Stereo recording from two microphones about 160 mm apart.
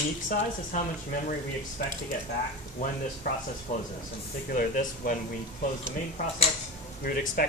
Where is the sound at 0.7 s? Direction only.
50° left (ahead or behind).